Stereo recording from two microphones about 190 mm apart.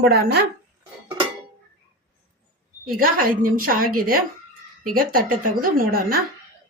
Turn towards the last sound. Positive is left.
turn(degrees=-50)  # may be behind; listen again after turning